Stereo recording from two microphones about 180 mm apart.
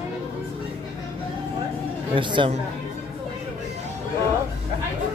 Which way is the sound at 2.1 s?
25° right (ahead or behind).